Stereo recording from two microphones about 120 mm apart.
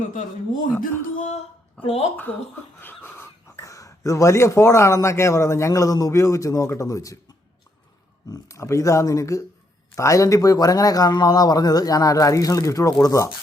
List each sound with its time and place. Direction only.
0.1 s speech: 90° left
1.8 s speech: 55° left (ahead or behind)
2.1 s speech: 15° left (ahead or behind)
8.3 s a man's voice: 25° left (ahead or behind)